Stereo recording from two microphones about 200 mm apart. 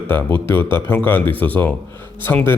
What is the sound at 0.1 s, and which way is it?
Speech, 10° left (ahead or behind).